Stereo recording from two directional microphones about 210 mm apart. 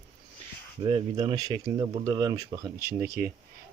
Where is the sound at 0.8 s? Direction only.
25° right (ahead or behind).